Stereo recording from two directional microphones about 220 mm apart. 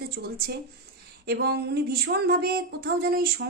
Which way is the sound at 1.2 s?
45° right (ahead or behind).